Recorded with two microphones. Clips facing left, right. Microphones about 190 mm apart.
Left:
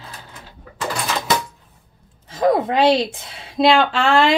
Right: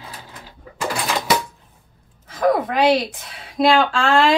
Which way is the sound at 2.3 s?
25° left (ahead or behind).